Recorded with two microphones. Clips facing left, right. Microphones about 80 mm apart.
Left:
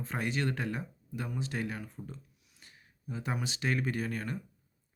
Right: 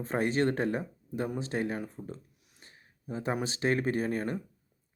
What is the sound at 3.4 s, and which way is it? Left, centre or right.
Speech, right.